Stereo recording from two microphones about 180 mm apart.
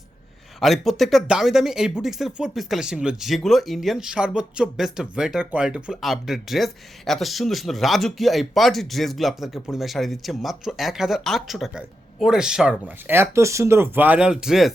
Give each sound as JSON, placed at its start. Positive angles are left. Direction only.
{"t": 0.6, "sound": "speech", "side_deg": 0}